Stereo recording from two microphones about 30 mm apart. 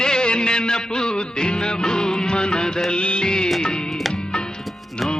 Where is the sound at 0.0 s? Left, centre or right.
Left.